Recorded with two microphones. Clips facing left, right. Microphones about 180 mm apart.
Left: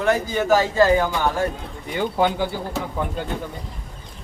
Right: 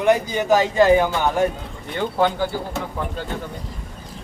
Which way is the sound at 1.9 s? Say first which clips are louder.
Even; 10° left (ahead or behind).